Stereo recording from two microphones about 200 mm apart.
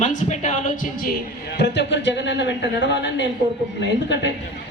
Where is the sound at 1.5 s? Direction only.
60° left (ahead or behind).